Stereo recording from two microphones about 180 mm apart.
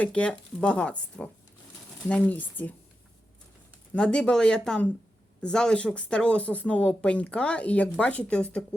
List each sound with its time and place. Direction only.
0.0 s speech: 5° left (ahead or behind)
3.9 s speech: 5° left (ahead or behind)